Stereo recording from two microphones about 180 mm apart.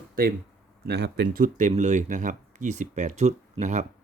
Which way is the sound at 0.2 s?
55° right (ahead or behind).